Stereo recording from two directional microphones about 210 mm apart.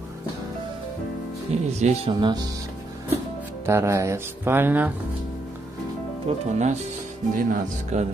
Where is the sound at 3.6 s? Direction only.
15° right (ahead or behind).